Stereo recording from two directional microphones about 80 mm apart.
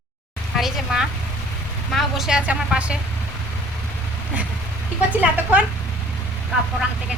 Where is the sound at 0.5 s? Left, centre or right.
Centre.